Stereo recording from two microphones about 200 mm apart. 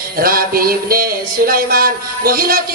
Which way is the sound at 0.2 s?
45° right (ahead or behind).